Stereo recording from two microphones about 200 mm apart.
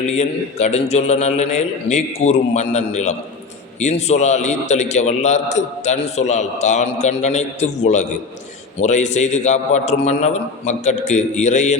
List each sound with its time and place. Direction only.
0.2 s a man's voice: 35° left (ahead or behind)